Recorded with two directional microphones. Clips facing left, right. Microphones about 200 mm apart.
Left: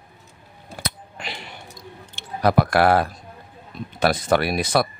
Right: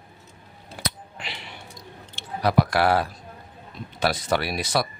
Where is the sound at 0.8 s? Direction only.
45° left (ahead or behind).